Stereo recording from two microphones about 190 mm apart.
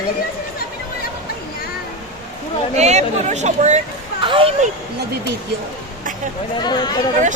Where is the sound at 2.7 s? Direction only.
35° right (ahead or behind).